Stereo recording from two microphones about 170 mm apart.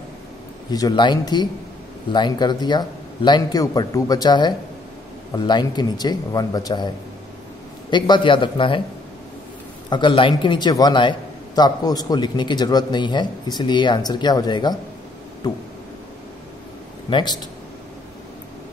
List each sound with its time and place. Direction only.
0.7 s a man's voice: 25° left (ahead or behind)
7.9 s a man's voice: 30° left (ahead or behind)
9.8 s a man's voice: 25° left (ahead or behind)
17.1 s a man's voice: 25° left (ahead or behind)